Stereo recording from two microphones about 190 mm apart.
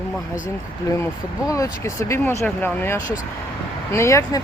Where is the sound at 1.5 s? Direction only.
15° left (ahead or behind).